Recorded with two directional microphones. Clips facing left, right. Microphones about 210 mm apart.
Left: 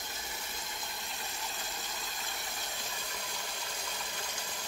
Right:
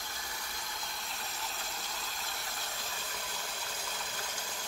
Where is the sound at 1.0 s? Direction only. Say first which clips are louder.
Even; centre (ahead or behind).